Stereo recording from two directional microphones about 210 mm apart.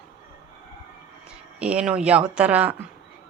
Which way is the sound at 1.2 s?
5° right (ahead or behind).